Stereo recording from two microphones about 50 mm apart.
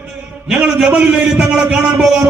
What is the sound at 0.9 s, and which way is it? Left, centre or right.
A man's voice, right.